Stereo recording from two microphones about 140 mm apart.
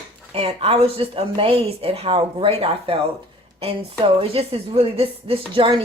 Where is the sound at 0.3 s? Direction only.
45° right (ahead or behind).